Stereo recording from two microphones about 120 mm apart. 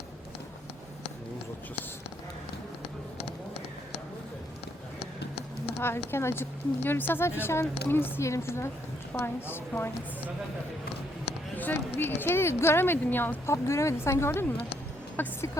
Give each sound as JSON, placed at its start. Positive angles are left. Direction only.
{"t": 5.8, "sound": "speech", "side_deg": 20}
{"t": 11.5, "sound": "speech", "side_deg": 15}